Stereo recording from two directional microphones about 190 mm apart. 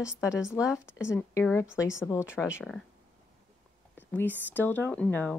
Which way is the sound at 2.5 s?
Centre (ahead or behind).